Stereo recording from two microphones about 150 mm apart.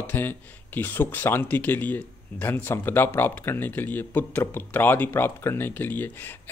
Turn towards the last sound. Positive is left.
turn(degrees=15)  # may be behind; listen again after turning